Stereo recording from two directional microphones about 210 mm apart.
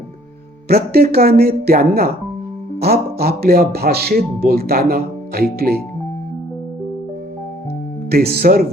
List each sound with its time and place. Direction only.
0.7 s speech: 45° right (ahead or behind)
8.1 s speech: 50° right (ahead or behind)